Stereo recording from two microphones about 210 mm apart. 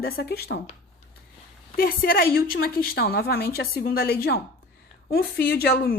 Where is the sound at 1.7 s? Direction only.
45° left (ahead or behind).